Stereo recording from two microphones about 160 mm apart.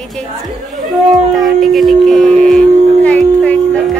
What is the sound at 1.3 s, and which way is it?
Howl, centre (ahead or behind).